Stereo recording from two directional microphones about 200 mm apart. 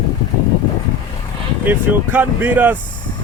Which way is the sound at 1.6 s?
10° right (ahead or behind).